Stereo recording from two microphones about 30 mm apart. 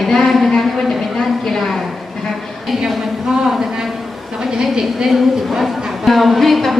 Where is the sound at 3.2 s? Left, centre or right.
Centre.